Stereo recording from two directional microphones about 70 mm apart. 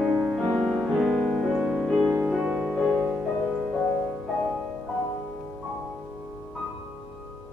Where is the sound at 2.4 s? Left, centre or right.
Right.